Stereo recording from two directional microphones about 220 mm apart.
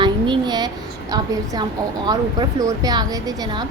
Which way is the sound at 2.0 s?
15° right (ahead or behind).